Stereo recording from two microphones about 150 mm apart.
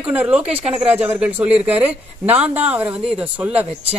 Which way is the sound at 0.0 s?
10° right (ahead or behind).